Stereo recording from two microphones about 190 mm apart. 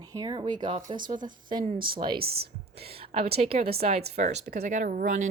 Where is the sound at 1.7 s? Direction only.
50° right (ahead or behind).